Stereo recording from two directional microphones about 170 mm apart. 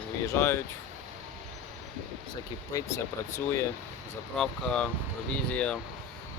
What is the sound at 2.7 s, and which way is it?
Speech, 20° left (ahead or behind).